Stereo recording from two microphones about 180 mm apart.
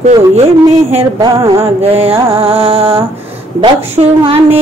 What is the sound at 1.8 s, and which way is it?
A woman's voice, 30° right (ahead or behind).